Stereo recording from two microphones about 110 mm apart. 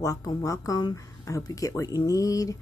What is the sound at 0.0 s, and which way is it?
Speech, 30° left (ahead or behind).